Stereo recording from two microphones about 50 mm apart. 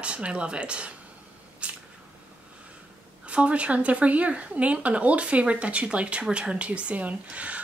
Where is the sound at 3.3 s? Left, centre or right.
Right.